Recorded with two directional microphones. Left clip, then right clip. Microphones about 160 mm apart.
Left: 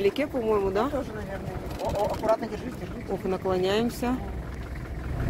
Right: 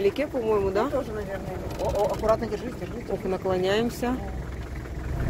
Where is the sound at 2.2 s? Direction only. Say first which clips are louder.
Right 1 dB; 80° right.